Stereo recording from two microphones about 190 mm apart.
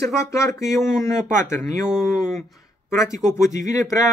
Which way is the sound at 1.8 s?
Centre (ahead or behind).